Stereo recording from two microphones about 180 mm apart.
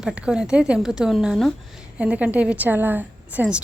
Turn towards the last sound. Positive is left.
turn(degrees=-5)  # may be behind; listen again after turning